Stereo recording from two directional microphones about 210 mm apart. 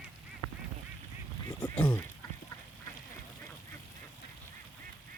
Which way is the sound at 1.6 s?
5° left (ahead or behind).